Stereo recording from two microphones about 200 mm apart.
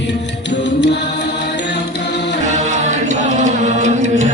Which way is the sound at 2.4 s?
35° right (ahead or behind).